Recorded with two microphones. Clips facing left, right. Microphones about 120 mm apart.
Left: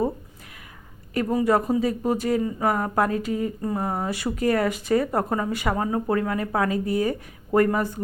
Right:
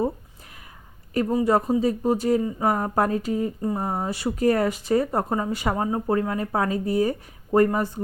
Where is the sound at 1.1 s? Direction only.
25° right (ahead or behind).